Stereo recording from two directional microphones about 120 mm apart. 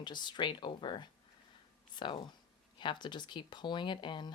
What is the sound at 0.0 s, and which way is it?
A woman's voice, 40° left (ahead or behind).